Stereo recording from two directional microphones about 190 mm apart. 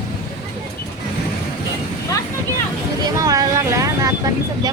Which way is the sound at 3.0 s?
20° right (ahead or behind).